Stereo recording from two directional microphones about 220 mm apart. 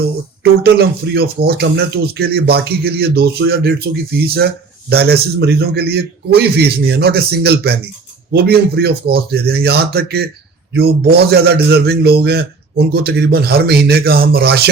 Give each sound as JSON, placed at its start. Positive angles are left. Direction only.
{"t": 0.6, "sound": "speech", "side_deg": -45}